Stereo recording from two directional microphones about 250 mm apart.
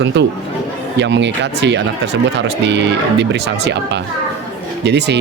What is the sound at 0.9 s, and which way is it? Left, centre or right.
A man's voice, right.